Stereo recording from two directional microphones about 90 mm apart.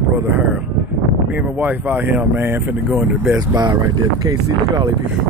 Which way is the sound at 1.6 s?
20° right (ahead or behind).